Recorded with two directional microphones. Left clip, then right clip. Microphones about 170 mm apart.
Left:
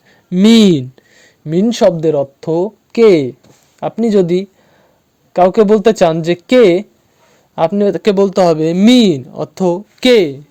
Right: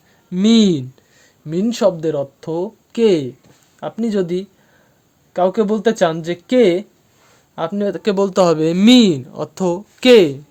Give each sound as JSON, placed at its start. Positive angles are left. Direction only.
{"t": 0.3, "sound": "speech", "side_deg": 35}
{"t": 8.3, "sound": "speech", "side_deg": 10}